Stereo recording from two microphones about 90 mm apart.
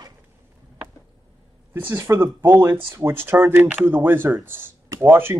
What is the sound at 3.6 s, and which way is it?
Speech, 10° right (ahead or behind).